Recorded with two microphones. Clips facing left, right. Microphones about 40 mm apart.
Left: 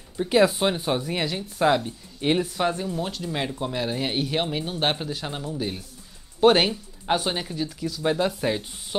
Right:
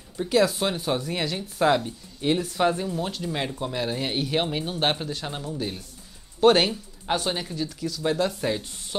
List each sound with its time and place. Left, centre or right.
0.2 s speech: centre
1.9 s speech: left
2.4 s speech: centre